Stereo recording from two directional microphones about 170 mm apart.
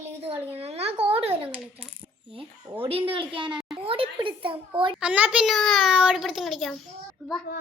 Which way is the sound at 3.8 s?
35° right (ahead or behind).